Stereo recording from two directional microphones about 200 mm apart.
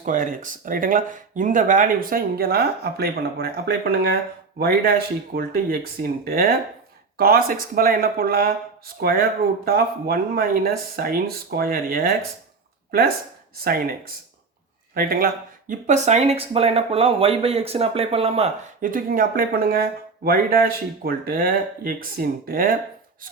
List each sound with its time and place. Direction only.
0.0 s speech: 40° right (ahead or behind)
13.7 s speech: 50° right (ahead or behind)
14.9 s speech: 50° right (ahead or behind)
15.7 s speech: 35° right (ahead or behind)